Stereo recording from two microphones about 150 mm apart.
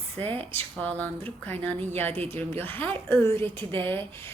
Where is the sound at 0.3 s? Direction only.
10° left (ahead or behind).